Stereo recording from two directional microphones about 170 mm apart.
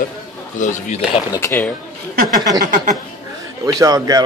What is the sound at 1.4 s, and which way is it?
Speech, 15° left (ahead or behind).